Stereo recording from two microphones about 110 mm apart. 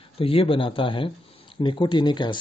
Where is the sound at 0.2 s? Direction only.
55° left (ahead or behind).